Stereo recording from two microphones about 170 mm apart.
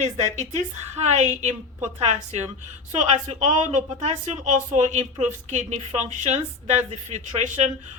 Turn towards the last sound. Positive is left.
turn(degrees=-45)  # may be behind; listen again after turning